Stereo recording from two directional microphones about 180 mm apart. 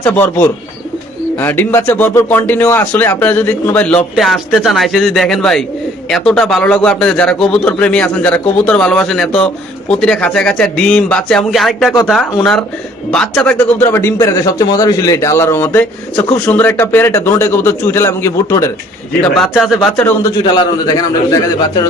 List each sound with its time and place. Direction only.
0.0 s a man's voice: 10° left (ahead or behind)
19.2 s a man's voice: 5° left (ahead or behind)
20.4 s a man's voice: 20° left (ahead or behind)